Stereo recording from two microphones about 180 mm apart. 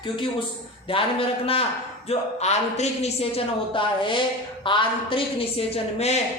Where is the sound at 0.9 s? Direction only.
30° left (ahead or behind).